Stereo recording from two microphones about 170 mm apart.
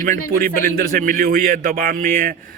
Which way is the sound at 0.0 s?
55° right (ahead or behind).